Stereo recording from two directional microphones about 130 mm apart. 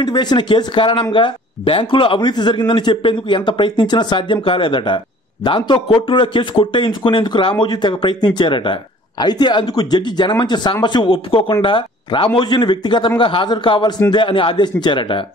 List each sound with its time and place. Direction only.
0.0 s a man's voice: 35° left (ahead or behind)